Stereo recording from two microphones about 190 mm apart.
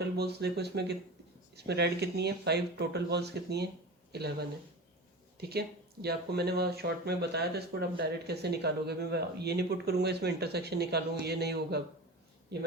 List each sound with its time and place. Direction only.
0.2 s speech: 60° right (ahead or behind)